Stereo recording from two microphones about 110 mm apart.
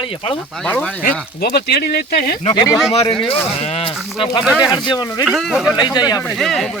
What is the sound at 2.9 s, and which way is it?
Speech, 65° left (ahead or behind).